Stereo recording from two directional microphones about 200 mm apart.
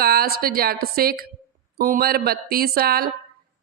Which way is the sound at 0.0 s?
50° right (ahead or behind).